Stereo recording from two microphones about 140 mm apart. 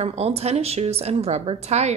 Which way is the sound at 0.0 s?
45° right (ahead or behind).